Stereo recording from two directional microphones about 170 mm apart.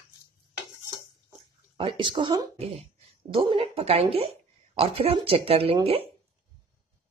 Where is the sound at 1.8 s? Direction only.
30° right (ahead or behind).